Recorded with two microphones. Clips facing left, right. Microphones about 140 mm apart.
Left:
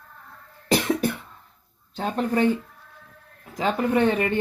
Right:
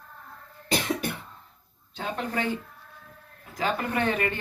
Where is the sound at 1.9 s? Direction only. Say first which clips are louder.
Left 7 dB; 40° left (ahead or behind).